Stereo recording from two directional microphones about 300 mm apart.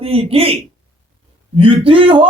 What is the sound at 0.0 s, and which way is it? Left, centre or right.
A man's voice, centre.